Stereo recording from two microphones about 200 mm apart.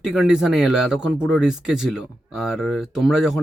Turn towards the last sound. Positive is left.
turn(degrees=0)  # may be behind; listen again after turning